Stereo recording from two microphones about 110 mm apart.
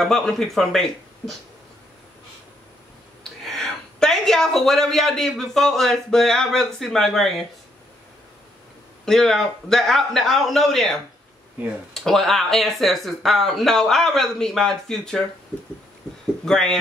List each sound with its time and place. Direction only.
0.0 s speech: 5° left (ahead or behind)
3.4 s speech: 5° left (ahead or behind)
9.0 s speech: 5° left (ahead or behind)
16.4 s speech: 5° left (ahead or behind)